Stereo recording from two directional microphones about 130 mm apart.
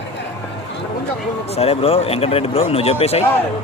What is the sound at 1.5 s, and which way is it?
Speech, 50° left (ahead or behind).